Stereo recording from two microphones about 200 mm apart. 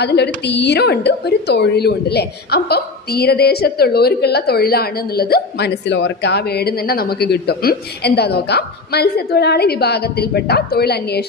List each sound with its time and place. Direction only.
0.0 s a woman's voice: 55° left (ahead or behind)